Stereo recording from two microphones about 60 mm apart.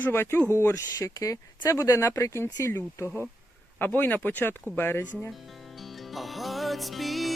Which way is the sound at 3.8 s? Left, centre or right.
Left.